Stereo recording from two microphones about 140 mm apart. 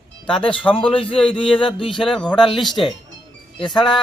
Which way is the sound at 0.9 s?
40° left (ahead or behind).